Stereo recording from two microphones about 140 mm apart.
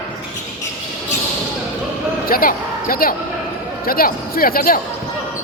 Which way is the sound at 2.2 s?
90° left.